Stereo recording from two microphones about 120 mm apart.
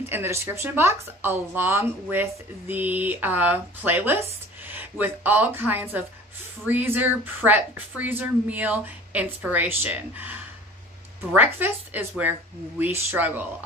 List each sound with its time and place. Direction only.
0.0 s a woman's voice: 20° right (ahead or behind)
11.3 s a woman's voice: 15° right (ahead or behind)